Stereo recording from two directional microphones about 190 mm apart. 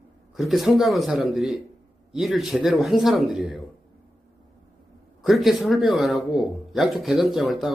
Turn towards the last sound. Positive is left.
turn(degrees=0)  # may be behind; listen again after turning